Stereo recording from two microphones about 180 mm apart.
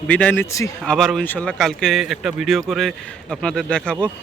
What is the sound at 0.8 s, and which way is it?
A man's voice, centre (ahead or behind).